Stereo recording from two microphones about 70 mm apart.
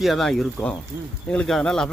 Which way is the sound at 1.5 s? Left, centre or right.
Centre.